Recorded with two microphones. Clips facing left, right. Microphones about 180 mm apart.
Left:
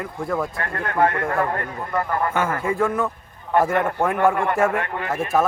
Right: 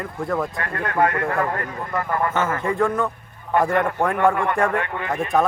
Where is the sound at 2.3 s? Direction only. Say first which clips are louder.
Even; 10° left (ahead or behind).